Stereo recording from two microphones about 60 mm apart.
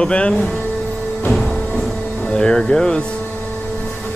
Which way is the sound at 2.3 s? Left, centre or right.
Centre.